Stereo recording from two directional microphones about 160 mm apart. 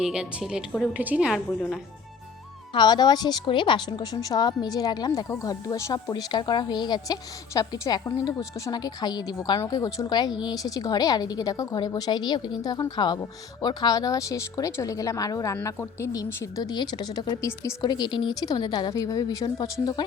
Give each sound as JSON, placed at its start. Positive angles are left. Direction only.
{"t": 0.0, "sound": "a woman's voice", "side_deg": -5}
{"t": 2.7, "sound": "speech", "side_deg": 25}